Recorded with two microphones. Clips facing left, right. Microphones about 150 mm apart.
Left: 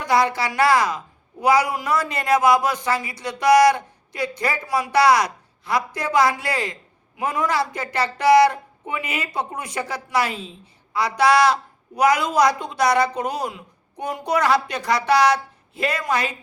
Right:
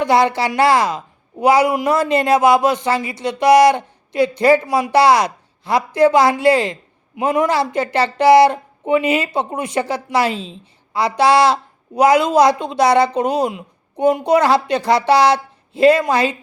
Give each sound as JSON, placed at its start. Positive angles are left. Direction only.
{"t": 0.0, "sound": "a woman's voice", "side_deg": -25}